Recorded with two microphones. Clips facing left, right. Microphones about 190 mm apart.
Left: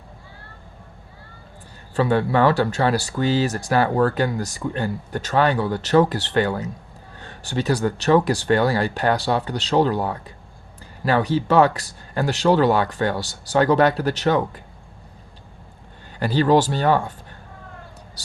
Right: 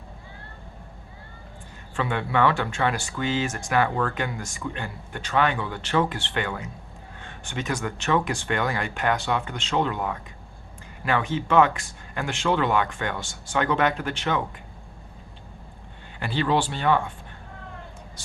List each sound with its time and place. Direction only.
2.0 s speech: 35° left (ahead or behind)
16.2 s speech: 40° left (ahead or behind)